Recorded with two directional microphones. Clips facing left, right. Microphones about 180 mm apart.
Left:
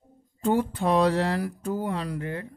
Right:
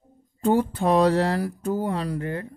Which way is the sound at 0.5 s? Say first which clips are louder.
Right 3 dB; 40° right (ahead or behind).